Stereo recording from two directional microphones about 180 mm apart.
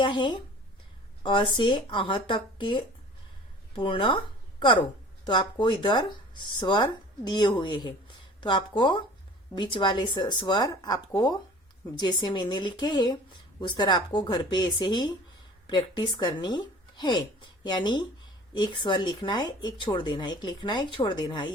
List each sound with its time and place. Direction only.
0.0 s speech: 25° left (ahead or behind)